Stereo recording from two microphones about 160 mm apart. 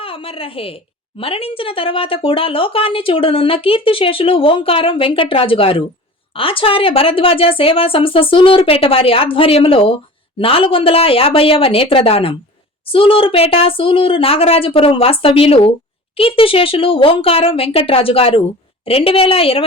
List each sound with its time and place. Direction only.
0.0 s a woman's voice: 35° left (ahead or behind)